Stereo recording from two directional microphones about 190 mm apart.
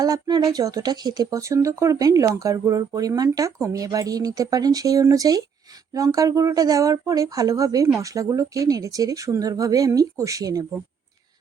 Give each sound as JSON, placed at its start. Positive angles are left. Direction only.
{"t": 0.0, "sound": "speech", "side_deg": -20}